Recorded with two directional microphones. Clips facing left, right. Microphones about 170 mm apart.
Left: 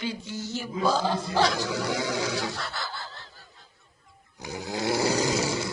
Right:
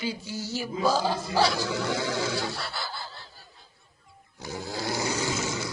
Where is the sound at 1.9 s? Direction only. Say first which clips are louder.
Even; 15° left (ahead or behind).